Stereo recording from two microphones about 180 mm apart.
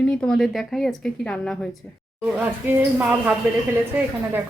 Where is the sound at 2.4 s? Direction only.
10° right (ahead or behind).